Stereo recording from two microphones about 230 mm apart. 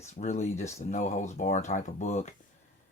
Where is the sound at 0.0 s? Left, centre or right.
Left.